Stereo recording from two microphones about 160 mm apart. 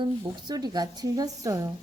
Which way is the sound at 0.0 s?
25° right (ahead or behind).